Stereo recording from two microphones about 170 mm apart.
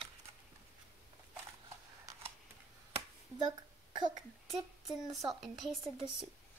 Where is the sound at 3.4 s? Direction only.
25° right (ahead or behind).